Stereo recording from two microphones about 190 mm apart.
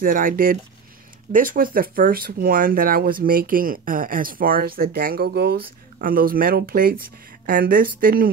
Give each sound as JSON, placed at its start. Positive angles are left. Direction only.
{"t": 0.0, "sound": "speech", "side_deg": -45}